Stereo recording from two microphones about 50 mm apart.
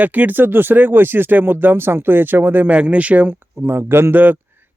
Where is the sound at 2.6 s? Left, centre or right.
Right.